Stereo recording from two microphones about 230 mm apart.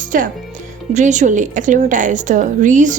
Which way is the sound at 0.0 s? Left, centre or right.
Right.